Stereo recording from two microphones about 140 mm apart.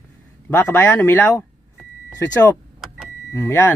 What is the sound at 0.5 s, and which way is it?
Speech, 15° left (ahead or behind).